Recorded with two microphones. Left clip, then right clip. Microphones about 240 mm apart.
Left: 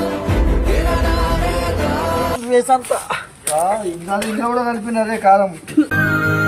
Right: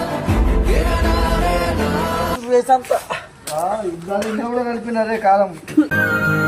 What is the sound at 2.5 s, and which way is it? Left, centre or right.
Speech, left.